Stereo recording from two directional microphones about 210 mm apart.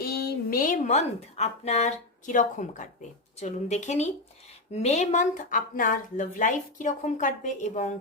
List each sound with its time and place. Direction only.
0.0 s speech: 50° left (ahead or behind)